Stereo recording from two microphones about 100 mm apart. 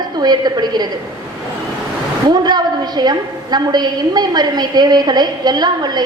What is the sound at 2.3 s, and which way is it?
A woman's voice, 45° right (ahead or behind).